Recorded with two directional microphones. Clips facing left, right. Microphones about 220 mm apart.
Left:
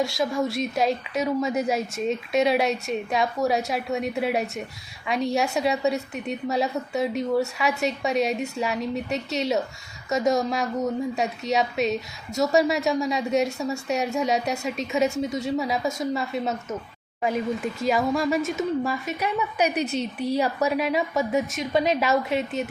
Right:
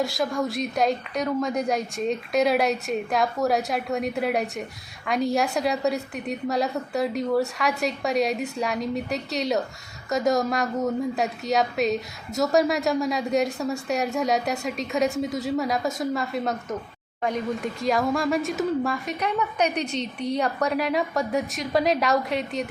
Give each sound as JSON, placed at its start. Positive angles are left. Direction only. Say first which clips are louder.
{"t": 0.0, "sound": "speech", "louder": "left 1 dB", "side_deg": 0}